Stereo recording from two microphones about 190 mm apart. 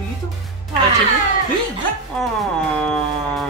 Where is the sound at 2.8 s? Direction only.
5° left (ahead or behind).